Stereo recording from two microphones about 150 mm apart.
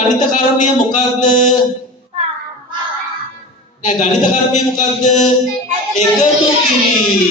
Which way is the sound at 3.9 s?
55° left (ahead or behind).